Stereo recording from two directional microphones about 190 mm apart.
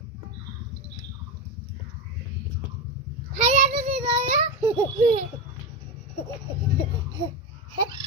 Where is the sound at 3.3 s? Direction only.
40° right (ahead or behind).